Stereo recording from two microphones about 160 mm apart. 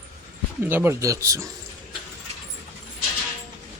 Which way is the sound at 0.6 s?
10° right (ahead or behind).